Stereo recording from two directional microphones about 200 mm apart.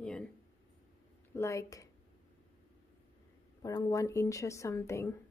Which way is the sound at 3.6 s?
15° left (ahead or behind).